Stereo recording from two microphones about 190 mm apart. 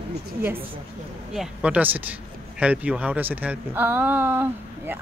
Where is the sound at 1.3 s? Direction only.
5° right (ahead or behind).